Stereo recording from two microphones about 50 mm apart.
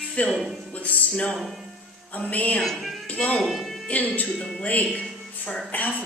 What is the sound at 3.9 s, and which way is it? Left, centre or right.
Speech, left.